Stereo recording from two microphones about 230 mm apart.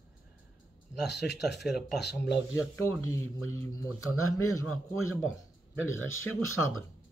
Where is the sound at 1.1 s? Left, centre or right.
Left.